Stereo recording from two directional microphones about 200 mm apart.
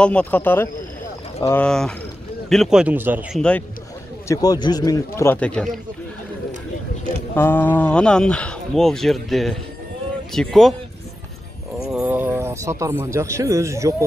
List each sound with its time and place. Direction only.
0.0 s a man's voice: 5° left (ahead or behind)
3.3 s speech: 5° left (ahead or behind)
4.3 s a man's voice: 20° left (ahead or behind)
7.3 s speech: 10° left (ahead or behind)
11.9 s speech: 5° right (ahead or behind)